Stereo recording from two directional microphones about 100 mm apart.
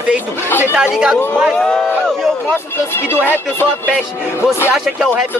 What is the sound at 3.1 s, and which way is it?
Music, 20° left (ahead or behind).